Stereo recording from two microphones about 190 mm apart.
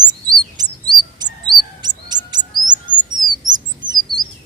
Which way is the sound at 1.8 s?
20° right (ahead or behind).